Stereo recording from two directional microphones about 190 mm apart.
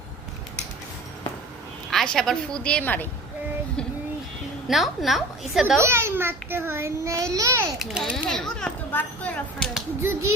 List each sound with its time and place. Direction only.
1.9 s speech: centre (ahead or behind)
4.7 s speech: centre (ahead or behind)
5.8 s a child's voice: 15° right (ahead or behind)
7.8 s speech: centre (ahead or behind)